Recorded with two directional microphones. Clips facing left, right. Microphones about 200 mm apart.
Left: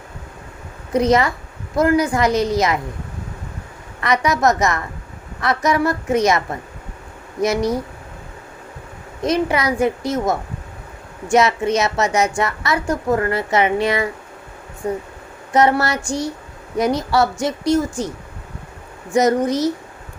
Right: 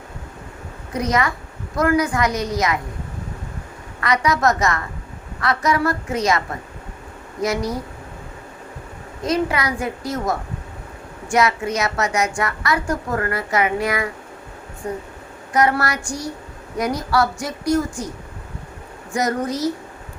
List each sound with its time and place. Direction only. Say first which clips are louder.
0.9 s a woman's voice: left 5 dB; 25° left (ahead or behind)
4.0 s a woman's voice: left 2 dB; 20° left (ahead or behind)
9.2 s a woman's voice: left 3 dB; 20° left (ahead or behind)
19.1 s a woman's voice: left 6 dB; 20° left (ahead or behind)